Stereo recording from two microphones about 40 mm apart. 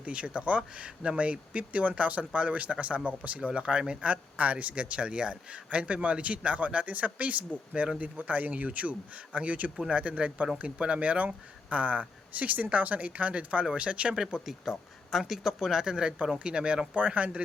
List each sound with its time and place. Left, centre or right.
0.0 s speech: right
4.1 s speech: right
4.7 s speech: right
14.1 s speech: centre
15.7 s speech: centre